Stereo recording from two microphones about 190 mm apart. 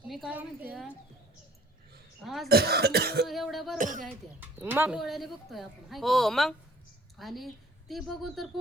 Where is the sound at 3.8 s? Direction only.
40° right (ahead or behind).